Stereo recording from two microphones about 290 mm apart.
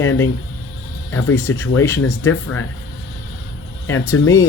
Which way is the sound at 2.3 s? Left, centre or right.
Left.